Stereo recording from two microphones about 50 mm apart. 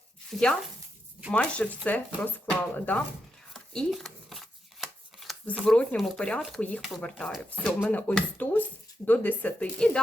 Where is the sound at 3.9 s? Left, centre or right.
Centre.